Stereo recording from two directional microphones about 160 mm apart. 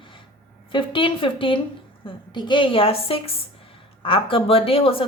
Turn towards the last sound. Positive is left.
turn(degrees=35)  # may be behind; listen again after turning